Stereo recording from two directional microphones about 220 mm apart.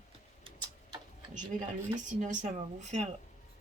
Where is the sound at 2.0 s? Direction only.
35° right (ahead or behind).